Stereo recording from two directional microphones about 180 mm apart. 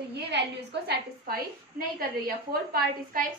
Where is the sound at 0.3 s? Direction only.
70° right (ahead or behind).